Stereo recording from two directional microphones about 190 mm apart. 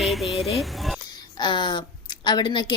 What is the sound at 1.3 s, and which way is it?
A woman's voice, 25° left (ahead or behind).